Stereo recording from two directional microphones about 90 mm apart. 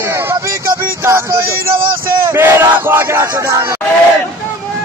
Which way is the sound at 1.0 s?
30° right (ahead or behind).